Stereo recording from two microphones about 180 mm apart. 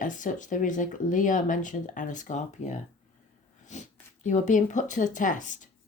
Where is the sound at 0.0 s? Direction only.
45° left (ahead or behind).